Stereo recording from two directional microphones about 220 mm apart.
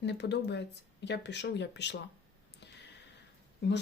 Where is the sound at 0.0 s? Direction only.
50° left (ahead or behind).